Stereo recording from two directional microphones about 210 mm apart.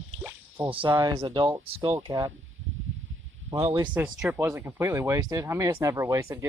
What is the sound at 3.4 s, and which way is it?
Speech, 30° right (ahead or behind).